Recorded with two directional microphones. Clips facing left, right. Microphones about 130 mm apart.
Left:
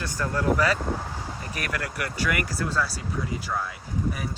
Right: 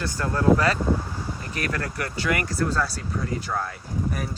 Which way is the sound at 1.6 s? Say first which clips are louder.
Right 2 dB; 35° right (ahead or behind).